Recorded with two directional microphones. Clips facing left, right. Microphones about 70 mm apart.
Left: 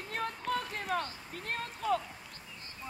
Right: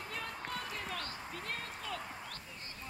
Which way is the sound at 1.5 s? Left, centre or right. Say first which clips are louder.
Left 12 dB; left.